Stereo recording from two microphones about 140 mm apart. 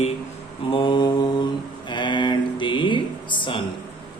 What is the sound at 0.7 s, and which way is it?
Speech, 35° left (ahead or behind).